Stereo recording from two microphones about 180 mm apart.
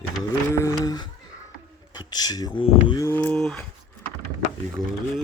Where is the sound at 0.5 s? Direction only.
20° left (ahead or behind).